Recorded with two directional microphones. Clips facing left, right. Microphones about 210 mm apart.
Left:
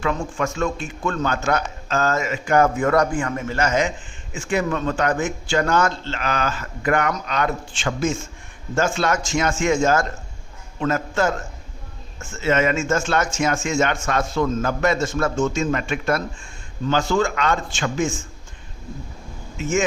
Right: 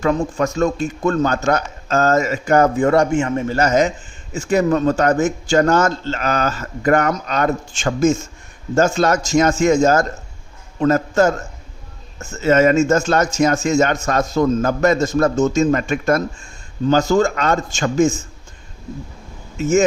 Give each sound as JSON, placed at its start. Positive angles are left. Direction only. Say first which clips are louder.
{"t": 0.0, "sound": "a man's voice", "louder": "right 6 dB", "side_deg": -40}
{"t": 19.5, "sound": "speech", "louder": "right 6 dB", "side_deg": -40}